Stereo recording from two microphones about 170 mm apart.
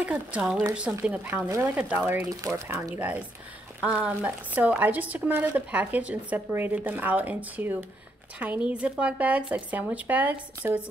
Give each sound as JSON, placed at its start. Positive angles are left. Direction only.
{"t": 0.0, "sound": "speech", "side_deg": -10}